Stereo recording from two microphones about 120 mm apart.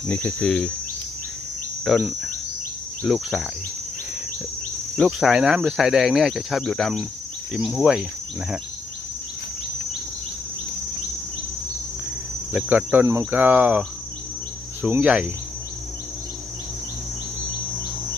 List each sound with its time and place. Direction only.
0.1 s speech: 15° left (ahead or behind)
1.8 s speech: centre (ahead or behind)
4.9 s speech: centre (ahead or behind)
12.5 s cricket: 15° right (ahead or behind)